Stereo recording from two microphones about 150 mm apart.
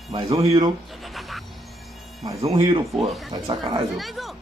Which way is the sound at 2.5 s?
35° right (ahead or behind).